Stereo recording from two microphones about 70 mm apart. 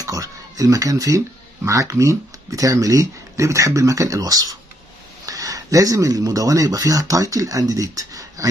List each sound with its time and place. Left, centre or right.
0.0 s speech: right